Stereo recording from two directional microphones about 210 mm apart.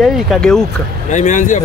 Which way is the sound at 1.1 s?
35° left (ahead or behind).